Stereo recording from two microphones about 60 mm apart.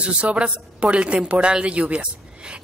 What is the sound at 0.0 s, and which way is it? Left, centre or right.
A woman's voice, centre.